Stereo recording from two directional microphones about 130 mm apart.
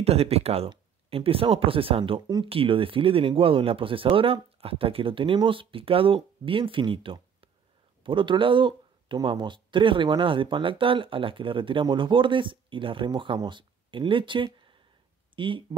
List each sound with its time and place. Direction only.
0.0 s speech: 50° right (ahead or behind)
2.2 s speech: 30° right (ahead or behind)
2.5 s speech: 45° right (ahead or behind)